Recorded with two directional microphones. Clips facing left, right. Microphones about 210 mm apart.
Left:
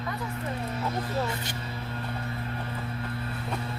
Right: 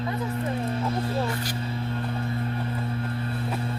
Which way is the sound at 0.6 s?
30° right (ahead or behind).